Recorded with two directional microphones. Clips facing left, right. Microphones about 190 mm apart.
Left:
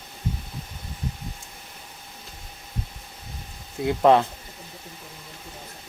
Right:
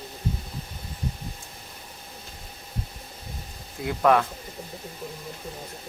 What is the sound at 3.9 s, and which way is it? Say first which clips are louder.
Speech: left 3 dB; 25° left (ahead or behind).